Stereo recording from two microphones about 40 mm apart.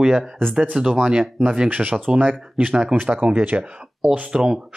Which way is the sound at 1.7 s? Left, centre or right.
Right.